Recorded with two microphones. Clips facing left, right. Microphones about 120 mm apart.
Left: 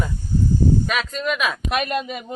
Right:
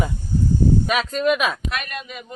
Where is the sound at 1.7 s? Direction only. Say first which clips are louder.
Left 7 dB; 25° left (ahead or behind).